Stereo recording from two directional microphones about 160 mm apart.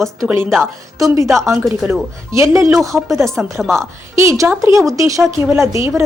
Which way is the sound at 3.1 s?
Centre (ahead or behind).